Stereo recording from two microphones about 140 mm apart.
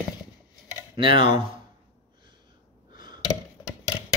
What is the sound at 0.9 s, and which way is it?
Speech, 35° right (ahead or behind).